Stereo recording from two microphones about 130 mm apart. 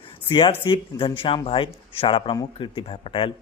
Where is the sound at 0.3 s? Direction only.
40° left (ahead or behind).